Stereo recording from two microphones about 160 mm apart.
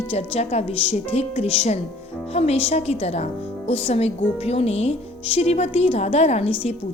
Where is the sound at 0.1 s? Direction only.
40° left (ahead or behind).